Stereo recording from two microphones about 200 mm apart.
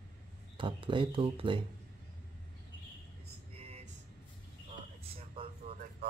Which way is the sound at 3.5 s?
30° right (ahead or behind).